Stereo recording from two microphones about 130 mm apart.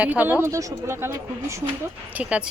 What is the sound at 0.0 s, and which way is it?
Speech, 10° right (ahead or behind).